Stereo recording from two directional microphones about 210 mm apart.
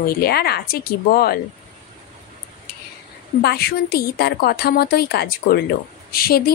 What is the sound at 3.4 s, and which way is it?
Speech, 50° left (ahead or behind).